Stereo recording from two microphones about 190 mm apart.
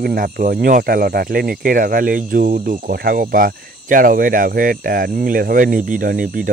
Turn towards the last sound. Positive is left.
turn(degrees=-50)  # may be behind; listen again after turning